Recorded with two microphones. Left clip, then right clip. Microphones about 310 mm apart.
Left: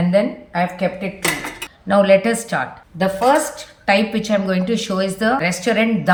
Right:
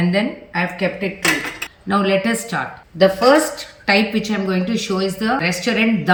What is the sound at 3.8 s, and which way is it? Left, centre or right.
A woman's voice, centre.